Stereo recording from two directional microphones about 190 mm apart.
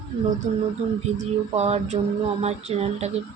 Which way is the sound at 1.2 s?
35° right (ahead or behind).